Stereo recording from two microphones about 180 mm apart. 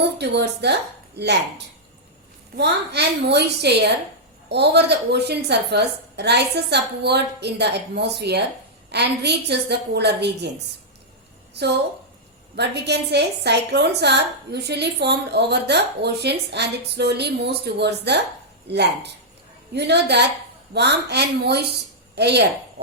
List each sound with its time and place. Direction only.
0.2 s a woman's voice: 70° right (ahead or behind)
11.5 s a woman's voice: 70° right (ahead or behind)